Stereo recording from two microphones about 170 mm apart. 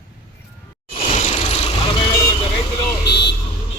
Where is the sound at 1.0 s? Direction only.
40° left (ahead or behind).